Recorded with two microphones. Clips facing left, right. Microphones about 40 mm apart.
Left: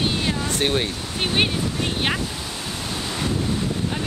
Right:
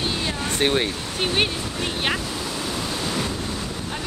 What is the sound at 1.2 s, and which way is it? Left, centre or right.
Speech, centre.